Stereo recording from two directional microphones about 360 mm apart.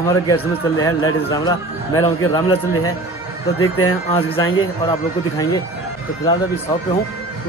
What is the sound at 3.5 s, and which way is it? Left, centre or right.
Speech, left.